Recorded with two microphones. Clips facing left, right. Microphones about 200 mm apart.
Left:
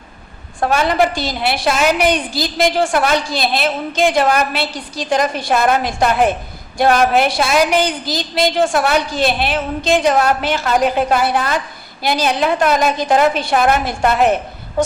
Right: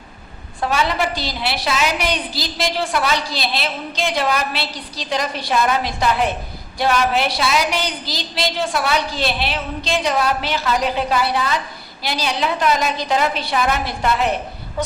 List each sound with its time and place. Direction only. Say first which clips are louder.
0.6 s a woman's voice: left 5 dB; 50° left (ahead or behind)